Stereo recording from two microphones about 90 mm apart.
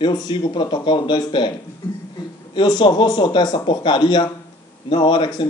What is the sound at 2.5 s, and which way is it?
A man's voice, 55° left (ahead or behind).